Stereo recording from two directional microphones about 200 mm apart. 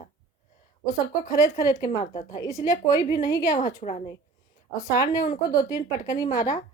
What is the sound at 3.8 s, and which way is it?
Speech, 35° left (ahead or behind).